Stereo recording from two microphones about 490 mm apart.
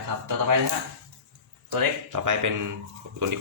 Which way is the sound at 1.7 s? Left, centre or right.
Right.